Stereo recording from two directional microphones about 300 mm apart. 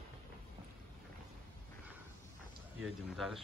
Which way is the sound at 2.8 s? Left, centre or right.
Centre.